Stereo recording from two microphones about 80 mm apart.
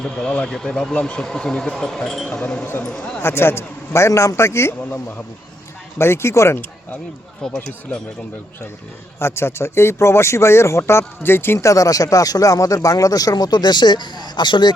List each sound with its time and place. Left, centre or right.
0.0 s speech: centre
3.2 s speech: left
6.0 s speech: left
7.4 s speech: centre
9.1 s speech: left
11.7 s speech: left